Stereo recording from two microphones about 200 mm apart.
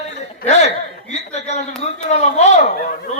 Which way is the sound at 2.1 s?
35° left (ahead or behind).